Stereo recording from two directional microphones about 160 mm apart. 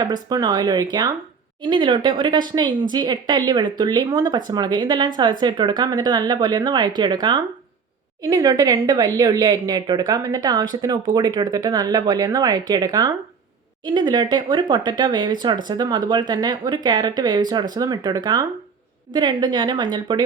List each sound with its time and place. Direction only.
0.0 s speech: 25° right (ahead or behind)